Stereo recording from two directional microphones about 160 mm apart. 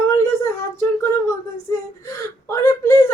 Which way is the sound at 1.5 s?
20° left (ahead or behind).